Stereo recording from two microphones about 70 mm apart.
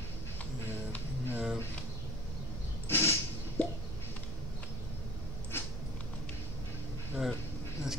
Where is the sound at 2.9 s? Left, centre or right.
Left.